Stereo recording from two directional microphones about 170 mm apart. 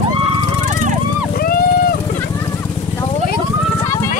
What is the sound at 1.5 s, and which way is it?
Vehicle, 60° left (ahead or behind).